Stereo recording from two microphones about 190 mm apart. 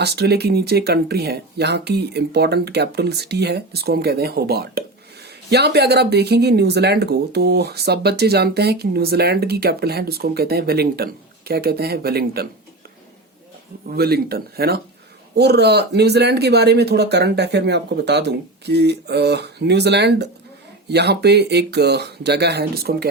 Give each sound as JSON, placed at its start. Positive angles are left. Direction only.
{"t": 0.0, "sound": "speech", "side_deg": -60}
{"t": 13.8, "sound": "speech", "side_deg": -55}